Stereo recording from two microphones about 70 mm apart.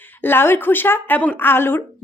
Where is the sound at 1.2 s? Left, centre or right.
Left.